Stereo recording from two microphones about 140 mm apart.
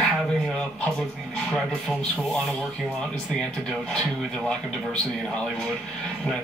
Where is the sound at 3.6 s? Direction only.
5° left (ahead or behind).